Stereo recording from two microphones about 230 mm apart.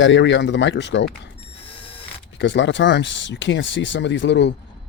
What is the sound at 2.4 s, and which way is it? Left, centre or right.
Speech, left.